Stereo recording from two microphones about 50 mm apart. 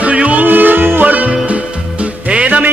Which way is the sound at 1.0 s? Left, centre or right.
Right.